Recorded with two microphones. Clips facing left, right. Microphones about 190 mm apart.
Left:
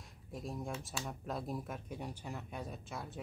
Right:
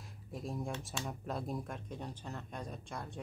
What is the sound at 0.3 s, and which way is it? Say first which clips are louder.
Speech: right 2 dB; centre (ahead or behind).